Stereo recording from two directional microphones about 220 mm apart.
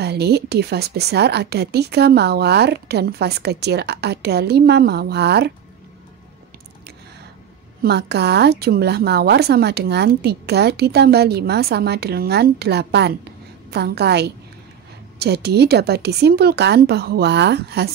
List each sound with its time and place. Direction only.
0.0 s a woman's voice: 45° right (ahead or behind)
7.8 s a woman's voice: 50° right (ahead or behind)